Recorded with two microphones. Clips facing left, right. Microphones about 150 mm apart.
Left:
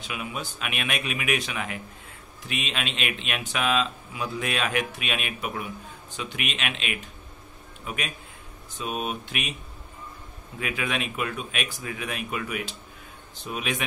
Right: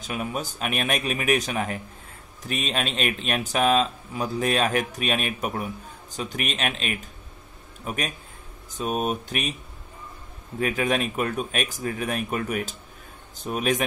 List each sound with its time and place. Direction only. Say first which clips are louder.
0.0 s a man's voice: right 4 dB; 40° right (ahead or behind)
10.6 s a man's voice: right 6 dB; 40° right (ahead or behind)